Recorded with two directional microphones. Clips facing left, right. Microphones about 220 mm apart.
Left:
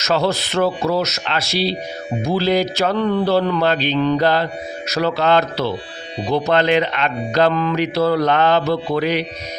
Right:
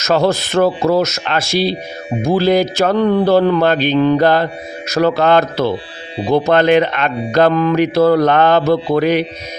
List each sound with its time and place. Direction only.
0.0 s speech: 50° right (ahead or behind)